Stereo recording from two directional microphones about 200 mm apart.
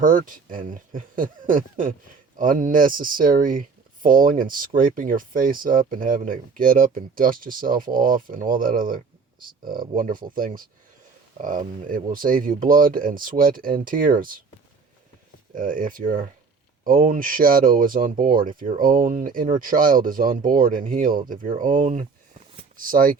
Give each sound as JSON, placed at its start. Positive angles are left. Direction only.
{"t": 0.0, "sound": "speech", "side_deg": -45}
{"t": 15.5, "sound": "speech", "side_deg": -40}